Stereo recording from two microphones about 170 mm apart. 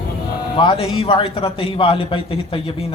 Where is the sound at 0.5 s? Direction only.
30° left (ahead or behind).